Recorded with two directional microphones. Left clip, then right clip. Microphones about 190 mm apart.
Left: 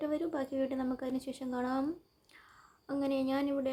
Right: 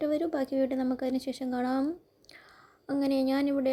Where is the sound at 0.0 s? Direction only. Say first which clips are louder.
Right 6 dB; 25° right (ahead or behind).